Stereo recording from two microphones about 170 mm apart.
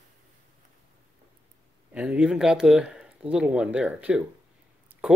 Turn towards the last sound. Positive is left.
turn(degrees=-5)  # may be behind; listen again after turning